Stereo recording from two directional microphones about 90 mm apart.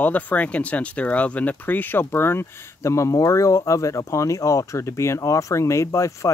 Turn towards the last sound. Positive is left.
turn(degrees=35)  # may be behind; listen again after turning